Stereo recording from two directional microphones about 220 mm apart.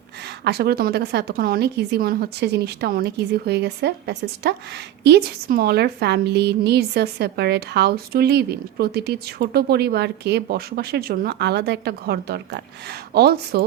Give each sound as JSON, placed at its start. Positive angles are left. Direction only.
{"t": 0.4, "sound": "a woman's voice", "side_deg": -45}